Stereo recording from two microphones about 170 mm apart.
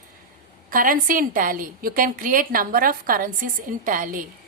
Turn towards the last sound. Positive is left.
turn(degrees=-50)  # may be behind; listen again after turning